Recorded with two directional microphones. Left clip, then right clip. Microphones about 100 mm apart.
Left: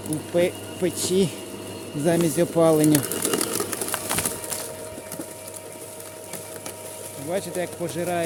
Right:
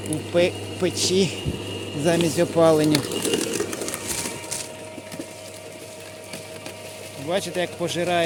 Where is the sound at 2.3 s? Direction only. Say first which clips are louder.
Right 2 dB; 50° left (ahead or behind).